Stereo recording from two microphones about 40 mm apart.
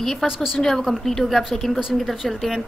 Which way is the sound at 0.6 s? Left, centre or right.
Centre.